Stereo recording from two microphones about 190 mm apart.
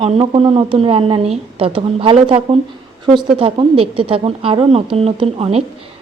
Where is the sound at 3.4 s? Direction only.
30° right (ahead or behind).